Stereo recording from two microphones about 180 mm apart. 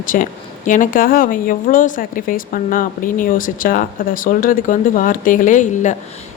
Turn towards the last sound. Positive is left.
turn(degrees=45)  # may be behind; listen again after turning